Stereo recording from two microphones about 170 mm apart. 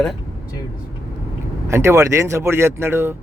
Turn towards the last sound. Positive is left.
turn(degrees=-15)  # may be behind; listen again after turning